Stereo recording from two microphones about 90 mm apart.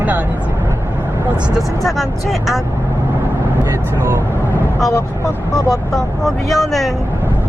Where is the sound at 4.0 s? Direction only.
35° right (ahead or behind).